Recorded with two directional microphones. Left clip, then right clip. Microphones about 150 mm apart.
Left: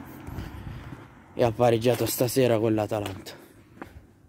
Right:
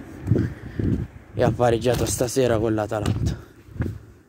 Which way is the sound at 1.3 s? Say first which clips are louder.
Right 2 dB; 15° left (ahead or behind).